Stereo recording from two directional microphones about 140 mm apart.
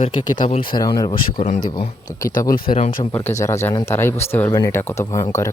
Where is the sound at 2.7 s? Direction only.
55° left (ahead or behind).